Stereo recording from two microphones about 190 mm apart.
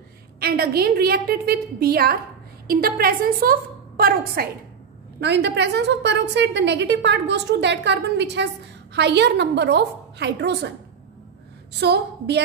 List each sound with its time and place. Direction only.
0.4 s a woman's voice: 55° right (ahead or behind)
5.2 s a woman's voice: 65° right (ahead or behind)
11.8 s a woman's voice: 60° right (ahead or behind)